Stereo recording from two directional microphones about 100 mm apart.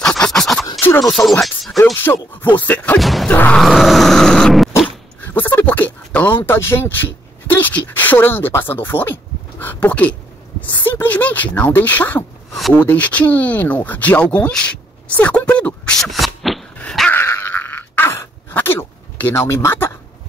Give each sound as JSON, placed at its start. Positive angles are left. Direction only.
{"t": 0.0, "sound": "scratch", "side_deg": 5}
{"t": 0.7, "sound": "a sound", "side_deg": 20}
{"t": 1.0, "sound": "grunt", "side_deg": 0}
{"t": 1.4, "sound": "speech", "side_deg": 0}
{"t": 2.0, "sound": "speech", "side_deg": 20}
{"t": 3.0, "sound": "grunt", "side_deg": 0}
{"t": 3.3, "sound": "speech", "side_deg": 15}
{"t": 3.6, "sound": "grunt", "side_deg": 0}
{"t": 5.3, "sound": "speech", "side_deg": 20}
{"t": 17.1, "sound": "a sound", "side_deg": 20}
{"t": 19.4, "sound": "speech", "side_deg": 25}